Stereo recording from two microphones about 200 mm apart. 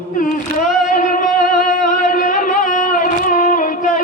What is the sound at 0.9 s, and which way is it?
Music, 45° left (ahead or behind).